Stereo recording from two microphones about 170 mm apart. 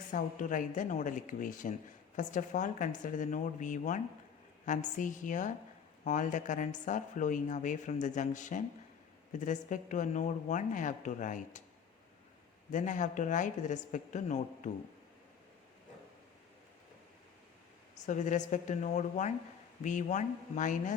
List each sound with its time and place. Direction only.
0.1 s speech: 50° left (ahead or behind)
12.7 s speech: 45° left (ahead or behind)
17.9 s speech: 45° left (ahead or behind)